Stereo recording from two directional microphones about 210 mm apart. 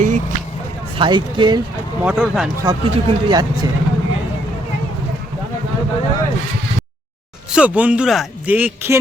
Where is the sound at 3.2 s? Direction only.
20° right (ahead or behind).